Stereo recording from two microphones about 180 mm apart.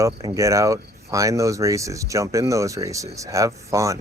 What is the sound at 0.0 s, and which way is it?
Speech, 20° right (ahead or behind).